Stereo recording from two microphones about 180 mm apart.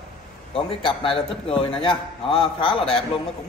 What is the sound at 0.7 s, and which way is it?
A man's voice, 30° left (ahead or behind).